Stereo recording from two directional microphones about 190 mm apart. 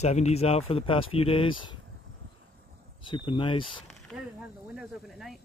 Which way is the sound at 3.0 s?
25° left (ahead or behind).